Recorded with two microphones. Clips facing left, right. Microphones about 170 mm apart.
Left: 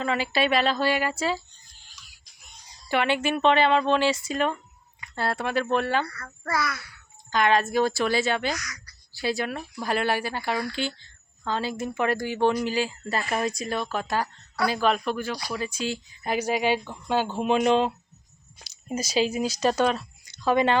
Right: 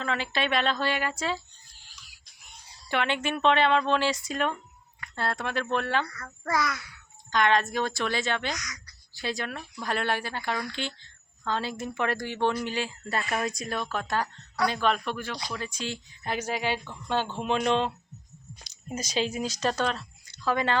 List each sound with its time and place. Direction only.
0.0 s a woman's voice: 5° left (ahead or behind)
2.7 s a woman's voice: 5° left (ahead or behind)
6.5 s a child's voice: 15° right (ahead or behind)
7.3 s a woman's voice: 5° left (ahead or behind)
8.5 s speech: 20° right (ahead or behind)
9.1 s a woman's voice: 5° left (ahead or behind)